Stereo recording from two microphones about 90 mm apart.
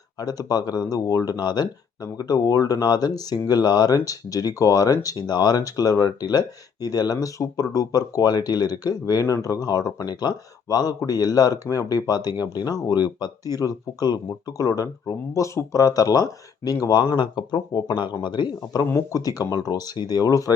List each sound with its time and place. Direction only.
0.2 s speech: 45° left (ahead or behind)
5.2 s speech: 50° left (ahead or behind)
17.0 s speech: 50° left (ahead or behind)
18.9 s speech: 35° left (ahead or behind)